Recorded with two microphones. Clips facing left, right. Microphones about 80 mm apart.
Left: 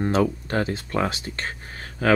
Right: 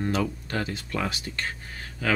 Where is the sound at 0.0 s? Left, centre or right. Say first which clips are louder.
Left 5 dB; left.